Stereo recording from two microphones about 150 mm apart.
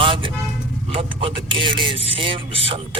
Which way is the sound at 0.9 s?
35° right (ahead or behind).